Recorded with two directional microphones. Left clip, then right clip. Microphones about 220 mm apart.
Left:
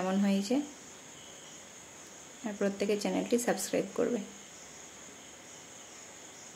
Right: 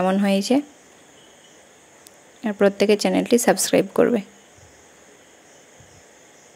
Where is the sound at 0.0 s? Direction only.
35° right (ahead or behind).